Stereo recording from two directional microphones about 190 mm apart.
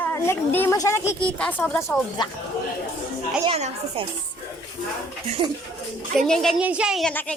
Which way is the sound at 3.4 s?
30° right (ahead or behind).